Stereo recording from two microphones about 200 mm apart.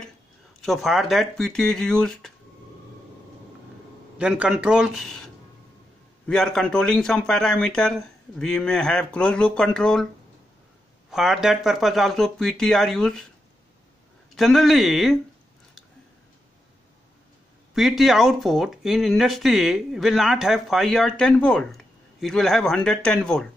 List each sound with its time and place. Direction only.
0.6 s speech: centre (ahead or behind)
4.2 s speech: 5° right (ahead or behind)
6.2 s speech: 5° left (ahead or behind)
11.1 s speech: centre (ahead or behind)
14.3 s speech: centre (ahead or behind)
17.7 s speech: centre (ahead or behind)